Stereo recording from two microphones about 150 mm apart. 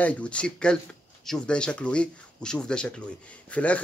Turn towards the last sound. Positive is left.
turn(degrees=10)  # may be behind; listen again after turning